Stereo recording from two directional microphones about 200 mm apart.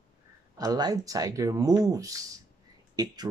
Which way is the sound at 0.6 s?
20° right (ahead or behind).